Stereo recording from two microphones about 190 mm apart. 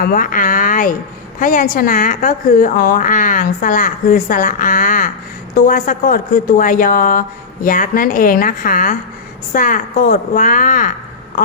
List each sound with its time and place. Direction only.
0.0 s a woman's voice: 45° left (ahead or behind)